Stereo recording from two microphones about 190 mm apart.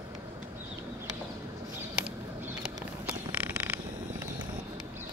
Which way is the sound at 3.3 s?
5° right (ahead or behind).